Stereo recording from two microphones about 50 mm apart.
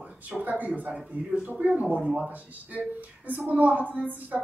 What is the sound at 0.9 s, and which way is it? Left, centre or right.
A woman's voice, right.